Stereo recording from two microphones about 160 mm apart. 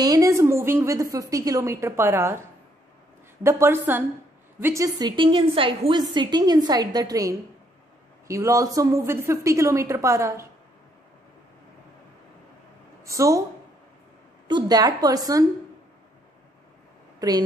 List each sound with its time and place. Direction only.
0.0 s a sound: 20° right (ahead or behind)
1.1 s a woman's voice: 20° right (ahead or behind)
3.4 s a woman's voice: 15° right (ahead or behind)
13.0 s speech: 20° right (ahead or behind)
14.5 s a woman's voice: 25° right (ahead or behind)